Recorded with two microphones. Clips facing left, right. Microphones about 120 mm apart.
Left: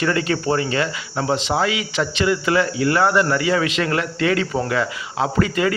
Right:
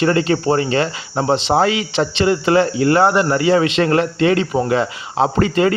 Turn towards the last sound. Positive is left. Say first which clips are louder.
# right 4 dB
turn(degrees=-30)  # may be behind; listen again after turning